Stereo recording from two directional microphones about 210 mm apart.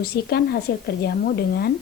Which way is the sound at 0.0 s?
50° left (ahead or behind).